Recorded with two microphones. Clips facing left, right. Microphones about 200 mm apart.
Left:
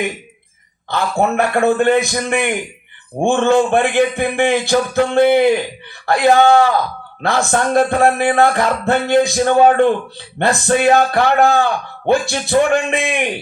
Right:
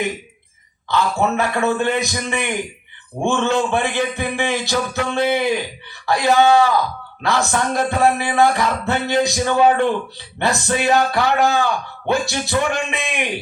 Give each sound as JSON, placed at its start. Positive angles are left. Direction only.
{"t": 0.9, "sound": "speech", "side_deg": 50}